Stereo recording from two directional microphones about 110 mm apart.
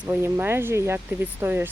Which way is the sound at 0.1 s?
20° right (ahead or behind).